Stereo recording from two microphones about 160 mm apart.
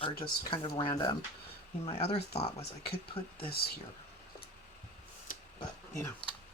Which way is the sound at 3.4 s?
75° left (ahead or behind).